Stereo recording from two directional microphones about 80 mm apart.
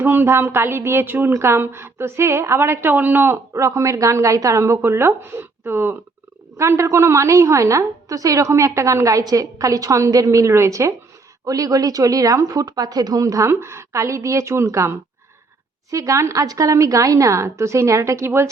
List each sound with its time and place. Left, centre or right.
0.0 s a woman's voice: right